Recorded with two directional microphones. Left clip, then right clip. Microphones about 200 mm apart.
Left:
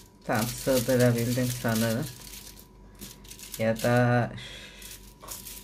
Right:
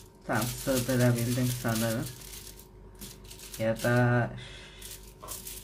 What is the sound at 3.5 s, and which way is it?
Speech, 40° left (ahead or behind).